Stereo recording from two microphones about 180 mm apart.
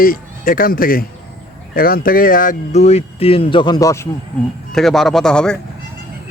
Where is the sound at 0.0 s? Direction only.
50° left (ahead or behind); by 4.1 s 15° left (ahead or behind).